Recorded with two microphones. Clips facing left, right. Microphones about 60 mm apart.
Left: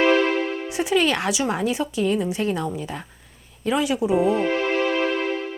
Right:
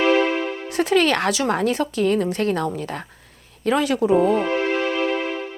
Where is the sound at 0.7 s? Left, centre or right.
Right.